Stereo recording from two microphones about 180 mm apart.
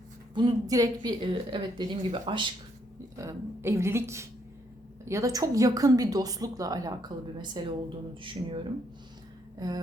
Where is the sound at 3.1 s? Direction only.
15° right (ahead or behind).